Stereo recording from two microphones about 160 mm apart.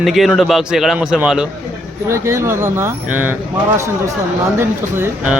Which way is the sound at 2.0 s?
15° right (ahead or behind).